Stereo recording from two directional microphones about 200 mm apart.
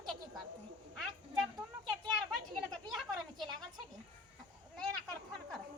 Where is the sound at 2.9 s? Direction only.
Centre (ahead or behind).